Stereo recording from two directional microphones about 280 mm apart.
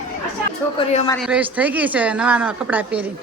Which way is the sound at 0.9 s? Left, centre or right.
Left.